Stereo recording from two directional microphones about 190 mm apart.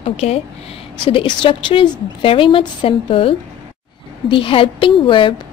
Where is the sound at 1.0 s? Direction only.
25° left (ahead or behind).